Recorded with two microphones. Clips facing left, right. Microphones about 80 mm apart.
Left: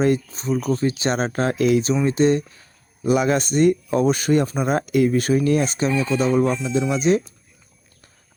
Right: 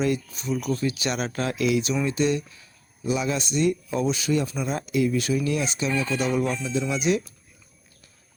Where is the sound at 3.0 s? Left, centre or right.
Left.